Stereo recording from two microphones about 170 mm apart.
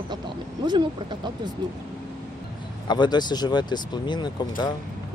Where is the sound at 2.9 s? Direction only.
25° left (ahead or behind).